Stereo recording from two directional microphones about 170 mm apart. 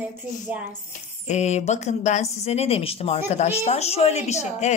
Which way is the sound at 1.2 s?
40° left (ahead or behind).